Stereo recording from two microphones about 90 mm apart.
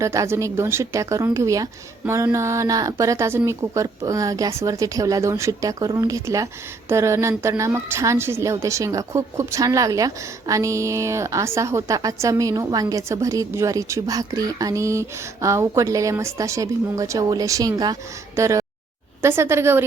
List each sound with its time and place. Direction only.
0.0 s a woman's voice: 35° right (ahead or behind)